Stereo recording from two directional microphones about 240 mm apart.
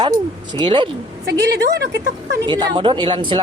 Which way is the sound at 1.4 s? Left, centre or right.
Right.